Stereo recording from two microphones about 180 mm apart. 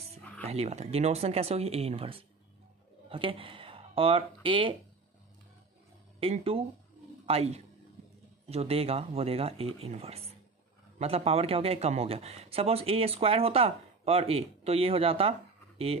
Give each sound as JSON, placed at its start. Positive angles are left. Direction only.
{"t": 0.4, "sound": "speech", "side_deg": -35}
{"t": 6.1, "sound": "speech", "side_deg": -35}